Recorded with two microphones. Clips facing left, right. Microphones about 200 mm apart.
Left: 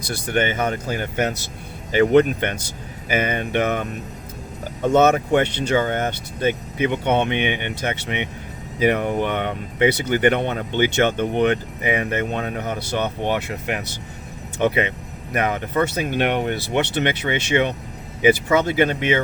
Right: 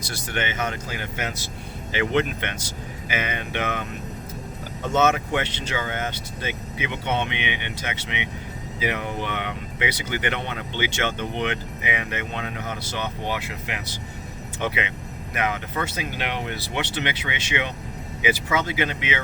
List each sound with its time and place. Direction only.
0.3 s speech: 40° left (ahead or behind)
4.9 s speech: 40° left (ahead or behind)